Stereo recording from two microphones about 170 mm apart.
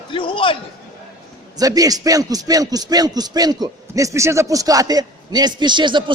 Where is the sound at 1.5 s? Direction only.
20° right (ahead or behind).